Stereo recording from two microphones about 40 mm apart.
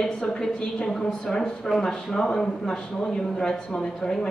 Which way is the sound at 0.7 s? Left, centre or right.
Centre.